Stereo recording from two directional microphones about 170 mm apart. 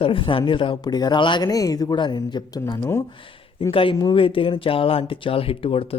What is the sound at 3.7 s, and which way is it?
Speech, 30° left (ahead or behind).